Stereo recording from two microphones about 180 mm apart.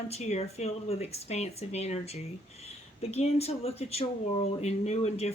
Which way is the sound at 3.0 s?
35° left (ahead or behind).